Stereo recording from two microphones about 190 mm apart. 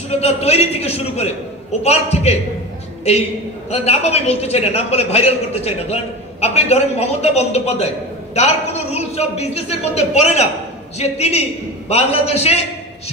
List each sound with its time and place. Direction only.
0.2 s a man's voice: 35° left (ahead or behind)
3.7 s a man's voice: 35° left (ahead or behind)